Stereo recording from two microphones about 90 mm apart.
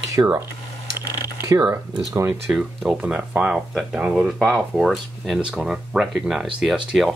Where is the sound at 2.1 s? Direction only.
30° right (ahead or behind).